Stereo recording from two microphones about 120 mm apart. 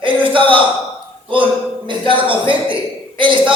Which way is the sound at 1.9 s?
45° right (ahead or behind).